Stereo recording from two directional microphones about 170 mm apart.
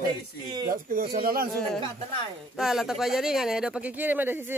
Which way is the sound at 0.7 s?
55° right (ahead or behind).